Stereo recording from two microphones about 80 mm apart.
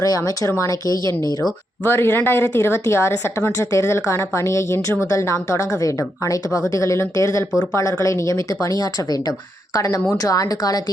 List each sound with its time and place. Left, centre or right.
0.0 s speech: left
1.8 s a woman's voice: left